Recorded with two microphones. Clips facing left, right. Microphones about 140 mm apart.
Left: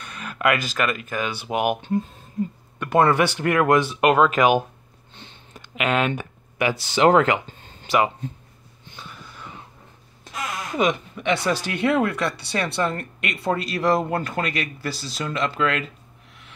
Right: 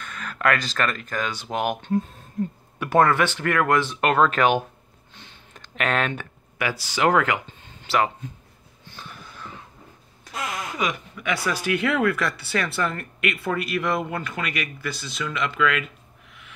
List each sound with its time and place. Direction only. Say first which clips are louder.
0.0 s speech: left 1 dB; 15° left (ahead or behind)
1.9 s speech: even; centre (ahead or behind)
3.0 s speech: left 1 dB; 15° left (ahead or behind)
6.6 s speech: left 4 dB; 25° left (ahead or behind)
10.8 s speech: left 8 dB; 25° left (ahead or behind)